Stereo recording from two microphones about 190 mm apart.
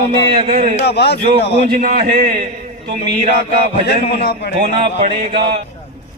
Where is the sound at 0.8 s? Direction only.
60° left (ahead or behind).